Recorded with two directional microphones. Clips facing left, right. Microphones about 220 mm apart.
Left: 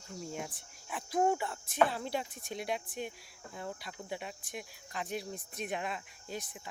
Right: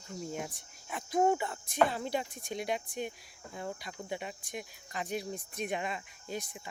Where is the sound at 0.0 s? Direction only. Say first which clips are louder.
Right 2 dB; centre (ahead or behind).